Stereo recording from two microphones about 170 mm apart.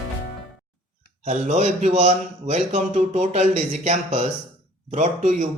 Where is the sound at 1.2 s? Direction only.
45° right (ahead or behind).